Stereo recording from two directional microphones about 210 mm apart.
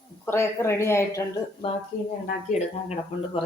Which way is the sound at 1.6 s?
25° left (ahead or behind).